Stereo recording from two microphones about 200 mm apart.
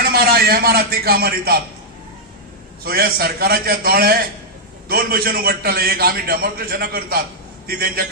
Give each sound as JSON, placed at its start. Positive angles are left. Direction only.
{"t": 0.0, "sound": "a man's voice", "side_deg": -50}
{"t": 2.8, "sound": "a man's voice", "side_deg": -50}